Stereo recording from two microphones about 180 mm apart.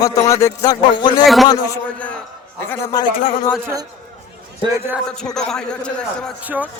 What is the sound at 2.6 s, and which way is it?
Speech, 15° left (ahead or behind).